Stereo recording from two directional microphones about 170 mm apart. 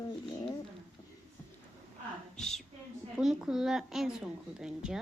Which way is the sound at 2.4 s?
5° left (ahead or behind).